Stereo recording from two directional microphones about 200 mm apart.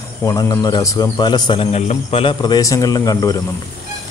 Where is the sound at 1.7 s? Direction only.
35° left (ahead or behind); by 3.4 s 20° left (ahead or behind).